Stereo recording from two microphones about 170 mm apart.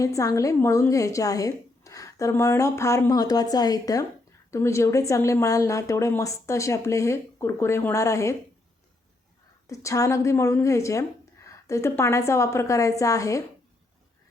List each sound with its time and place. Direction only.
0.0 s a woman's voice: 20° left (ahead or behind)
9.6 s a woman's voice: 20° left (ahead or behind)